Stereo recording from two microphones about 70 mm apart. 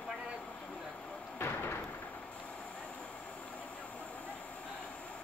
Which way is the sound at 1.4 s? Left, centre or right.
Left.